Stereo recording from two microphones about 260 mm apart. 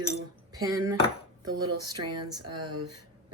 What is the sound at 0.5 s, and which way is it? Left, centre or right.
Dishes, centre.